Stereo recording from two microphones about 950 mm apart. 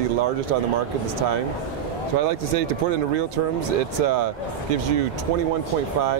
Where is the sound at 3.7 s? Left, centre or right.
Right.